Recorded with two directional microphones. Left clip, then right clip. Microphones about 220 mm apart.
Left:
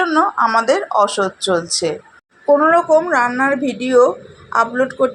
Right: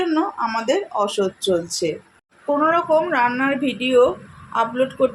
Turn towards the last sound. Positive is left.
turn(degrees=20)  # may be behind; listen again after turning